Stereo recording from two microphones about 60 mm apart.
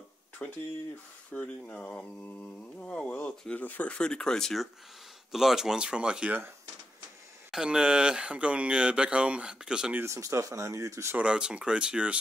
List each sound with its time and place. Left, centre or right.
0.4 s speech: left
5.3 s speech: centre
7.5 s speech: centre
10.0 s speech: right
11.1 s speech: centre